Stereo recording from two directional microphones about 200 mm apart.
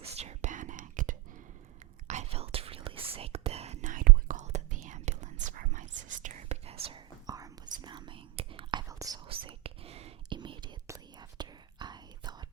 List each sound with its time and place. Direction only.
0.0 s whispering: 30° right (ahead or behind)
6.8 s whispering: 20° right (ahead or behind)